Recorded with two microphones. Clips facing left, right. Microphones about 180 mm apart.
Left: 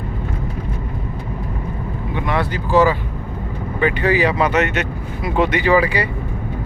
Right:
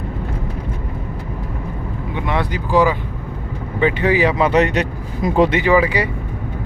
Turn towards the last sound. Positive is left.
turn(degrees=-20)  # may be behind; listen again after turning